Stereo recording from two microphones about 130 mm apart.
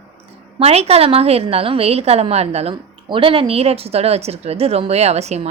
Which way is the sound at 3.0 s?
40° right (ahead or behind).